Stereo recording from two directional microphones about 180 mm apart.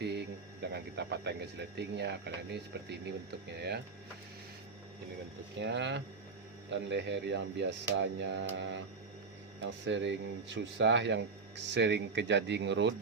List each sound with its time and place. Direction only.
0.0 s speech: 65° right (ahead or behind)
5.5 s speech: 80° right
9.8 s speech: 80° right